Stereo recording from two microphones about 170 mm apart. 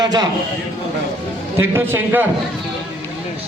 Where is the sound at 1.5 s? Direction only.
15° right (ahead or behind).